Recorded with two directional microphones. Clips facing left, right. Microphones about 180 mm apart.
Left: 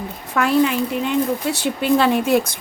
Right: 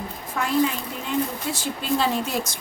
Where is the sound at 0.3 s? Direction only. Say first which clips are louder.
Left 6 dB; 70° left (ahead or behind).